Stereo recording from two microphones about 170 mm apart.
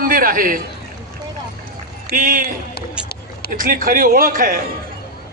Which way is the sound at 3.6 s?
55° right (ahead or behind).